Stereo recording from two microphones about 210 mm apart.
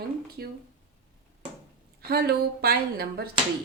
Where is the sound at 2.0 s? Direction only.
50° right (ahead or behind).